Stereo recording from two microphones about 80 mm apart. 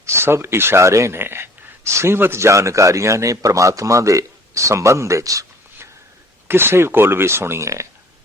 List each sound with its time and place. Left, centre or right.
0.0 s speech: right
6.5 s speech: right